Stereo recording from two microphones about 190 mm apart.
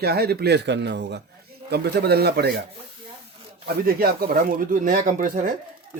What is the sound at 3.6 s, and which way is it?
Speech, 55° right (ahead or behind).